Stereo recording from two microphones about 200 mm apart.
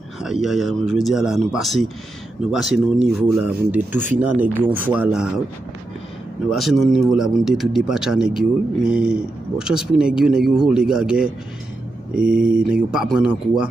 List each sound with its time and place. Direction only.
0.2 s speech: centre (ahead or behind)
6.5 s speech: centre (ahead or behind)
12.2 s speech: 45° right (ahead or behind)
12.7 s speech: centre (ahead or behind)